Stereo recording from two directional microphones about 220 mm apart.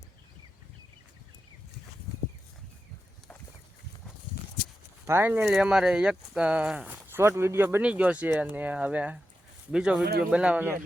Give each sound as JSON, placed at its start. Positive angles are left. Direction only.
{"t": 5.0, "sound": "speech", "side_deg": -10}
{"t": 10.0, "sound": "speech", "side_deg": -45}
{"t": 10.3, "sound": "speech", "side_deg": -5}